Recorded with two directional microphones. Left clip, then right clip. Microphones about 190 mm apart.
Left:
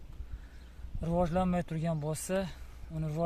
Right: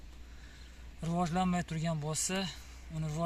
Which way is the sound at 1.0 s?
50° left (ahead or behind).